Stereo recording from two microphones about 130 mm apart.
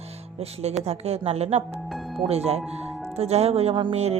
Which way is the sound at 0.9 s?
55° right (ahead or behind).